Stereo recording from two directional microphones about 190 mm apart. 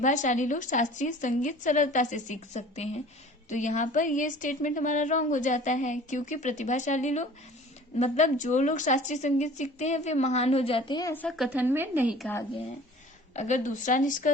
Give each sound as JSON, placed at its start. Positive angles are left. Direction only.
{"t": 0.0, "sound": "a woman's voice", "side_deg": 40}
{"t": 11.1, "sound": "speech", "side_deg": 5}
{"t": 13.3, "sound": "a woman's voice", "side_deg": 40}